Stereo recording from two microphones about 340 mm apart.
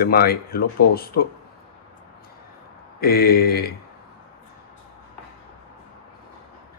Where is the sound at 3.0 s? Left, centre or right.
Left.